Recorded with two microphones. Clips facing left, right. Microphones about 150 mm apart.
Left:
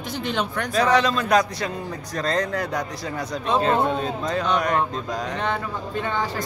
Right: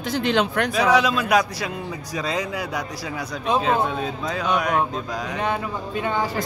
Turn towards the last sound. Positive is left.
turn(degrees=-10)  # may be behind; listen again after turning